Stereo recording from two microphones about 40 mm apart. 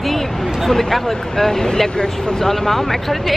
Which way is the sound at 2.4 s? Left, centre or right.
Centre.